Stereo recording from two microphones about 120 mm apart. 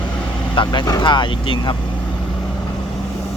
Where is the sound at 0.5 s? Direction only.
40° left (ahead or behind).